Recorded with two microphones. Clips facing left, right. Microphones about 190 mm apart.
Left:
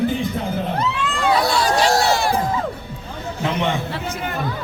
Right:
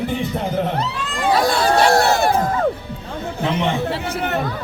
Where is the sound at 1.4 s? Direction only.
50° right (ahead or behind).